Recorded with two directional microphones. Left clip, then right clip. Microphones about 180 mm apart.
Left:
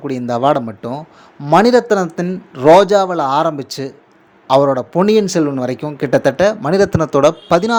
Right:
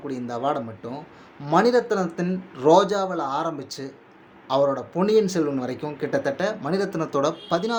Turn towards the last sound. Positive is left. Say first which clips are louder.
# left 12 dB
turn(degrees=40)  # may be behind; listen again after turning